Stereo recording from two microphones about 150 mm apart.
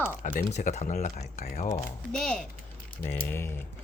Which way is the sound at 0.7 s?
50° left (ahead or behind).